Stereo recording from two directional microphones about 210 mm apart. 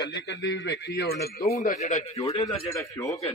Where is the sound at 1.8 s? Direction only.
35° left (ahead or behind).